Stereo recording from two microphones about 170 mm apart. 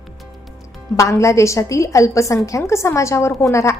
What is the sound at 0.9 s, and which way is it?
A woman's voice, 20° left (ahead or behind).